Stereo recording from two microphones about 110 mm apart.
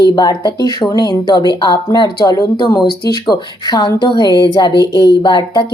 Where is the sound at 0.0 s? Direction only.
40° left (ahead or behind).